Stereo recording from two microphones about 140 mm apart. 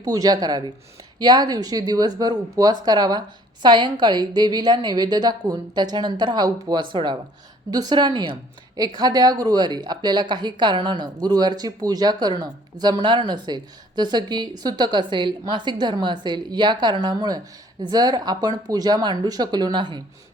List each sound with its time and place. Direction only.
0.0 s speech: 25° right (ahead or behind)